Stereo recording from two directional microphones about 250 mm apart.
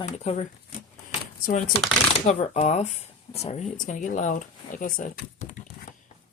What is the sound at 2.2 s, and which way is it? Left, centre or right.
Speech, left.